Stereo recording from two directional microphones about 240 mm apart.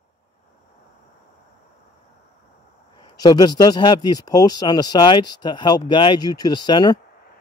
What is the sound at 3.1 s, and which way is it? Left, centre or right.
Speech, centre.